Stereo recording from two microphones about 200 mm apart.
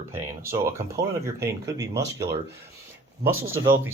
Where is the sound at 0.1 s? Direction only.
15° right (ahead or behind).